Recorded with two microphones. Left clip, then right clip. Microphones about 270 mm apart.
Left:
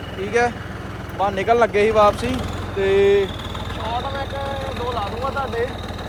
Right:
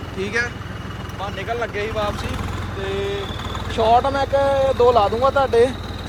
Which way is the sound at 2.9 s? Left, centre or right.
Left.